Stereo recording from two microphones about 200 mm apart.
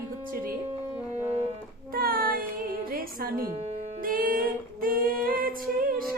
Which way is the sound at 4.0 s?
45° right (ahead or behind).